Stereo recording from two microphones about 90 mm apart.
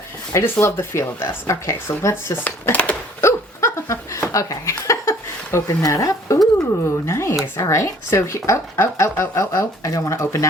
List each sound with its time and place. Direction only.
0.3 s speech: 30° left (ahead or behind)
3.2 s hiccup: 30° left (ahead or behind)
6.8 s speech: 30° left (ahead or behind)